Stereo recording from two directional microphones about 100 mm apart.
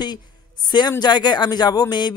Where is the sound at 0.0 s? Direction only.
45° left (ahead or behind).